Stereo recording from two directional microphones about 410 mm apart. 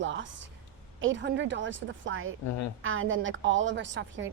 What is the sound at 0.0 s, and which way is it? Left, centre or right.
A woman's voice, right.